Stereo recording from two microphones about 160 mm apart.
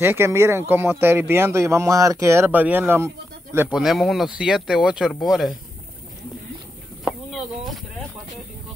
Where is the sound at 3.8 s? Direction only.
Centre (ahead or behind).